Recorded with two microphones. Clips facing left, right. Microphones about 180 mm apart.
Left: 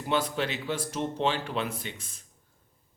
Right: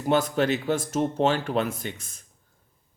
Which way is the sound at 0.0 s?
45° right (ahead or behind).